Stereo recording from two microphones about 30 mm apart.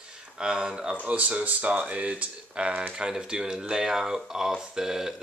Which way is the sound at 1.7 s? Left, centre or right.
Right.